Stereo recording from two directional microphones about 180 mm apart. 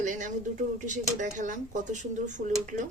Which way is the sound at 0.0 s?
45° right (ahead or behind).